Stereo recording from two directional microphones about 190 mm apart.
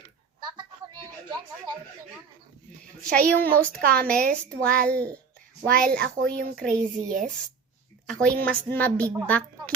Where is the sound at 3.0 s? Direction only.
5° left (ahead or behind).